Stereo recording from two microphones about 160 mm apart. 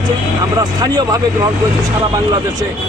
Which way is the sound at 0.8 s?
25° right (ahead or behind).